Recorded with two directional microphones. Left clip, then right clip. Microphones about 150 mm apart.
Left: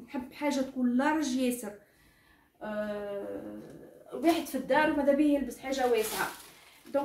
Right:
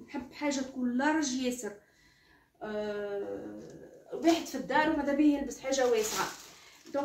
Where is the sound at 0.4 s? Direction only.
25° left (ahead or behind).